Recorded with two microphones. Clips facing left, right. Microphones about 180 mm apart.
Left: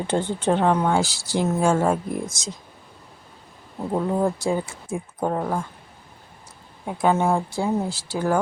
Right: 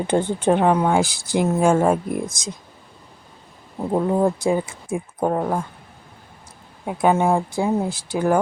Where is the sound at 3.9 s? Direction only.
25° right (ahead or behind).